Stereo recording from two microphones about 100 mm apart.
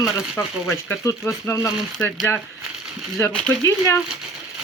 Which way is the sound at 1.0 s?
30° left (ahead or behind).